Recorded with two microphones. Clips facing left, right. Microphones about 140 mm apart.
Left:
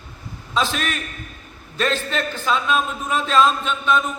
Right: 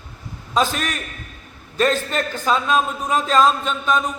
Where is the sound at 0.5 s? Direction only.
40° right (ahead or behind).